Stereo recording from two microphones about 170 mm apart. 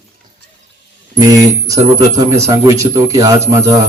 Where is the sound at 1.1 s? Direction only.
20° right (ahead or behind).